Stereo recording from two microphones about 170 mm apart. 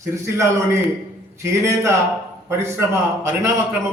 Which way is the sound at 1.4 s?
15° right (ahead or behind).